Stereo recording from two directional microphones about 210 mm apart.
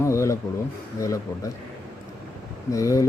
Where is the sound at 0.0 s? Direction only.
15° left (ahead or behind).